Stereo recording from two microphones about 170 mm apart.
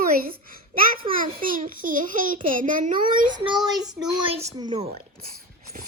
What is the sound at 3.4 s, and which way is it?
Child singing, 25° right (ahead or behind).